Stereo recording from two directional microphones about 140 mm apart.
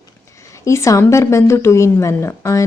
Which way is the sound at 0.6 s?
20° left (ahead or behind).